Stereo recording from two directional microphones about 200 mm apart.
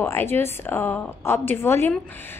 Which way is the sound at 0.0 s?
10° left (ahead or behind).